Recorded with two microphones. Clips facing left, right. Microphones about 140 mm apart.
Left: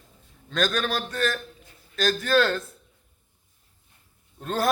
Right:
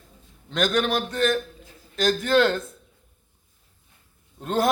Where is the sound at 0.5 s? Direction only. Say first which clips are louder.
Right 3 dB; 15° right (ahead or behind).